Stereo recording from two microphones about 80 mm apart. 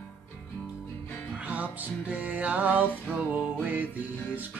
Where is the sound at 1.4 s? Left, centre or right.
Centre.